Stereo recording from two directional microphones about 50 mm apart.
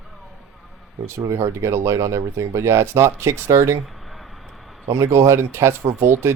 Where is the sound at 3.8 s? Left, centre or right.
Centre.